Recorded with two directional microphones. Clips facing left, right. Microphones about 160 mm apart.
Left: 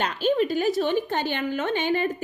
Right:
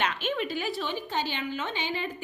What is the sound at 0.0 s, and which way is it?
A woman's voice, 35° left (ahead or behind).